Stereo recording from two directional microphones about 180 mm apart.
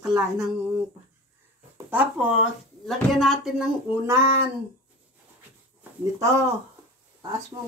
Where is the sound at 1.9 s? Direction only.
10° right (ahead or behind).